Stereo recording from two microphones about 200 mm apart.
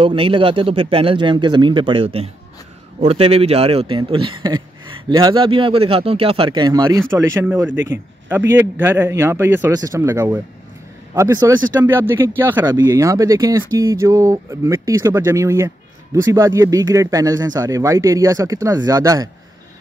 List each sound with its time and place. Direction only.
0.0 s speech: 25° right (ahead or behind)